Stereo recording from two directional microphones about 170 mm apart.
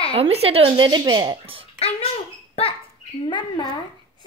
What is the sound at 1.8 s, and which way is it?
Speech, 35° left (ahead or behind).